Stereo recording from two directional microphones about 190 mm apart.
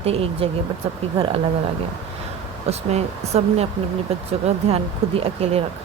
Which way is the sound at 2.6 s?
35° right (ahead or behind).